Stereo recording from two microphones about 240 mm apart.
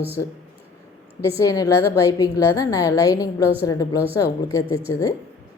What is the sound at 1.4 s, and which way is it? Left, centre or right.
A woman's voice, centre.